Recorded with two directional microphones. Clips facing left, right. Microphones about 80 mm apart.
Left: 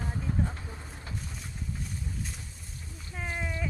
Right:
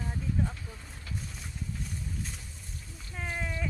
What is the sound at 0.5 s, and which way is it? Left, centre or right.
Vehicle, left.